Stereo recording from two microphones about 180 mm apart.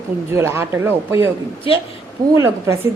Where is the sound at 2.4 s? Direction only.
15° right (ahead or behind).